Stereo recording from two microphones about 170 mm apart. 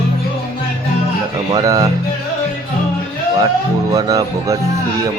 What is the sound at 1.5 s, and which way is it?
Speech, 20° right (ahead or behind).